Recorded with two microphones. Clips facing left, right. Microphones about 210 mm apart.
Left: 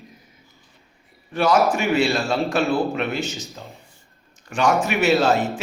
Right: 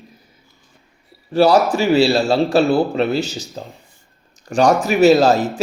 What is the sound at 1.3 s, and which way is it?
A man's voice, 35° right (ahead or behind).